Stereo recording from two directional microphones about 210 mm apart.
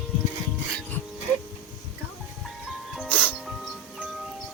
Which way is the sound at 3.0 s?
5° left (ahead or behind).